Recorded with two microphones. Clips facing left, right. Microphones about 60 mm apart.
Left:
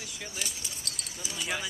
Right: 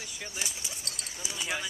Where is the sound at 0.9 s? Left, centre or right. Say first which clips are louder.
Left 3 dB; right.